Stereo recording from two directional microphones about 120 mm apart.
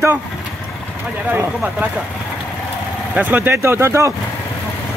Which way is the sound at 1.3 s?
10° right (ahead or behind).